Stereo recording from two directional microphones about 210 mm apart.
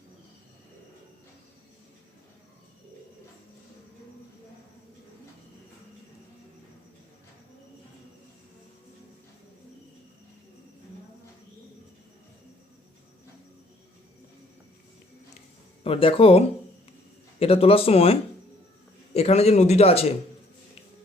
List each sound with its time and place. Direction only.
15.8 s speech: 25° left (ahead or behind)
17.4 s speech: 25° left (ahead or behind)